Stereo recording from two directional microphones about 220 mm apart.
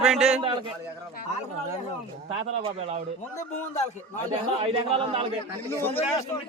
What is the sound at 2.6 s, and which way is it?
Speech, 25° right (ahead or behind).